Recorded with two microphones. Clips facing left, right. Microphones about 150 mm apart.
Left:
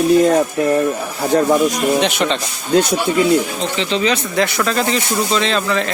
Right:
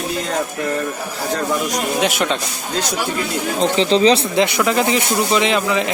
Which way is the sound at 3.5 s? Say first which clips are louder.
Right 4 dB; 35° right (ahead or behind).